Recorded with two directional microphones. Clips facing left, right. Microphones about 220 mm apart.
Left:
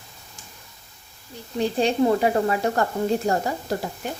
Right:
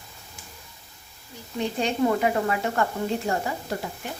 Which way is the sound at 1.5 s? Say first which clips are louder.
Left 4 dB; 30° left (ahead or behind).